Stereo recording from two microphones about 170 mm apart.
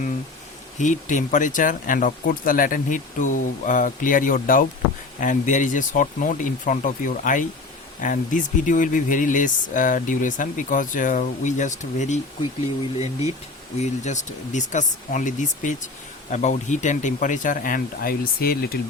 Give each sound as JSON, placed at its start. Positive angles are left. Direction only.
{"t": 0.8, "sound": "speech", "side_deg": 45}
{"t": 13.7, "sound": "speech", "side_deg": 45}